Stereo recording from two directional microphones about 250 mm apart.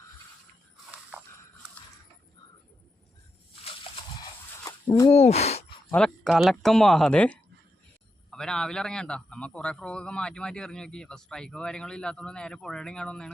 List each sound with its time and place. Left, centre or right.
4.2 s a sound: centre
5.1 s speech: left
5.9 s a man's voice: centre